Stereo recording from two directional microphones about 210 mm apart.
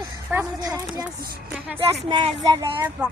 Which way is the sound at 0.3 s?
10° right (ahead or behind).